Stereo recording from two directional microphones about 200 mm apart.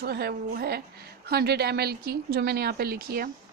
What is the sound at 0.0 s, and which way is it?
Speech, 50° right (ahead or behind).